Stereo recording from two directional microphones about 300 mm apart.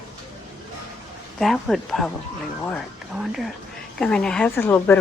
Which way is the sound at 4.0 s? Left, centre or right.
Centre.